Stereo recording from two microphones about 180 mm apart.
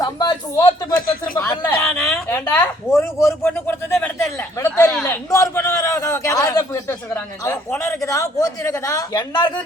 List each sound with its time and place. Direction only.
0.0 s a sound: 20° left (ahead or behind)
1.4 s a woman's voice: 15° left (ahead or behind)
5.0 s a man's voice: 15° left (ahead or behind)